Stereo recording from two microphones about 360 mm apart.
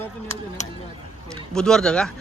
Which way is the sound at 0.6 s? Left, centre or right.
Centre.